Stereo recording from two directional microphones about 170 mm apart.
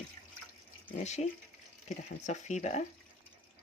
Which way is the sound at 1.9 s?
45° left (ahead or behind).